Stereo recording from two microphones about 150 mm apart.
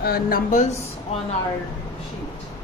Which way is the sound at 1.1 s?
40° left (ahead or behind).